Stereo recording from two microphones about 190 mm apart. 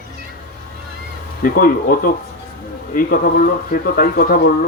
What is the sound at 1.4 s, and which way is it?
Speech, 45° left (ahead or behind).